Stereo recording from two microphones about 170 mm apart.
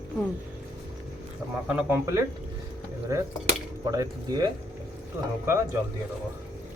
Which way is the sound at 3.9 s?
25° right (ahead or behind).